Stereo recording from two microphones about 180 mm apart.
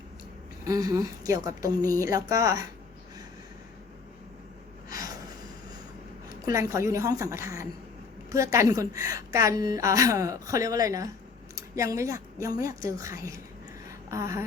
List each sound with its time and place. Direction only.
0.6 s speech: 20° right (ahead or behind)
6.4 s a woman's voice: 15° right (ahead or behind)